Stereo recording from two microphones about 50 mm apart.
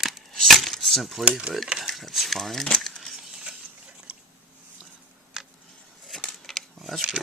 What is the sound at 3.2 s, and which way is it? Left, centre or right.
Mechanisms, centre.